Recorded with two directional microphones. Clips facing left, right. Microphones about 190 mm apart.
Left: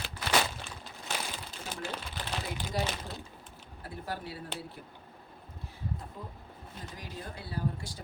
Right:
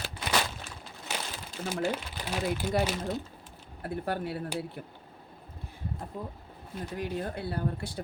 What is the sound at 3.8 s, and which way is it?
Speech, 60° right (ahead or behind).